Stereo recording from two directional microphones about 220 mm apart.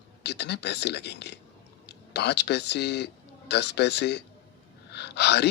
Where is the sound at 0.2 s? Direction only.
50° left (ahead or behind).